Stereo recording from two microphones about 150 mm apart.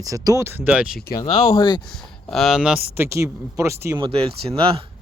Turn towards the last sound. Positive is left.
turn(degrees=-35)  # may be behind; listen again after turning